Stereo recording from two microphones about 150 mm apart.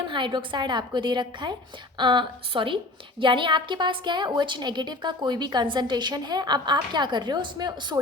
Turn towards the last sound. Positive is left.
turn(degrees=-30)  # may be behind; listen again after turning